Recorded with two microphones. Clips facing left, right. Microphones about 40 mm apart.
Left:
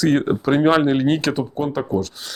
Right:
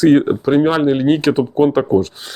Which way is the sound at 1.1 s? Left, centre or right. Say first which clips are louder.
Right 6 dB; centre.